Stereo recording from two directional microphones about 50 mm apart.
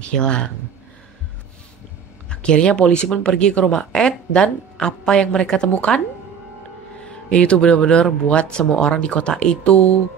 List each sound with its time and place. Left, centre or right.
0.0 s speech: centre
2.2 s speech: centre
7.1 s speech: left